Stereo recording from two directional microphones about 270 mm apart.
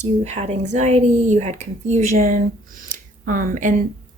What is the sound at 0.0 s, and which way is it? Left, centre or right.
Speech, right.